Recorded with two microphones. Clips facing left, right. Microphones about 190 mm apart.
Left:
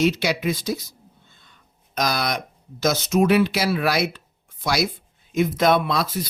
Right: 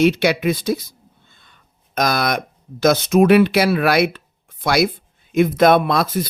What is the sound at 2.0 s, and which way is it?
Speech, 55° right (ahead or behind).